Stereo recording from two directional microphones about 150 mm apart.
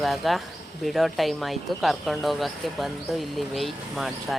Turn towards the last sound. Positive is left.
turn(degrees=0)  # may be behind; listen again after turning